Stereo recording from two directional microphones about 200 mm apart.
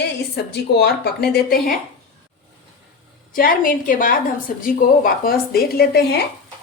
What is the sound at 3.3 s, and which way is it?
Speech, 45° left (ahead or behind).